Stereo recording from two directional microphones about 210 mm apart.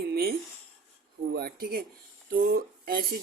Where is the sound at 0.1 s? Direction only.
45° right (ahead or behind).